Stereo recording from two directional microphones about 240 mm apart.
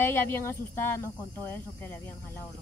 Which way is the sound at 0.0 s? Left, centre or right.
Centre.